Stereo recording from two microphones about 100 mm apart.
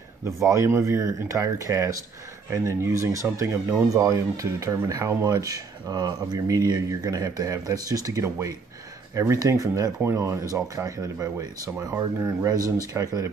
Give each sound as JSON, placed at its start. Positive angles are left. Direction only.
{"t": 0.2, "sound": "speech", "side_deg": -30}